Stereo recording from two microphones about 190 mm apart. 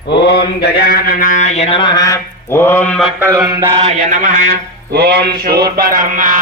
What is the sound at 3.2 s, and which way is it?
Mantra, 15° right (ahead or behind).